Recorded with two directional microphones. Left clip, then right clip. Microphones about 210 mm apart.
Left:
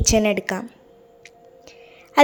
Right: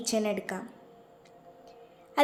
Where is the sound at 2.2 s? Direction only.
40° left (ahead or behind).